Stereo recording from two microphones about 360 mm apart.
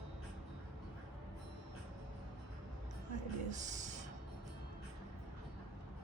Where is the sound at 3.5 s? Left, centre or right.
Centre.